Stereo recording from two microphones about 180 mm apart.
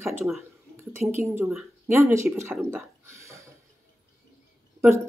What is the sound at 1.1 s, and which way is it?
Speech, 15° right (ahead or behind).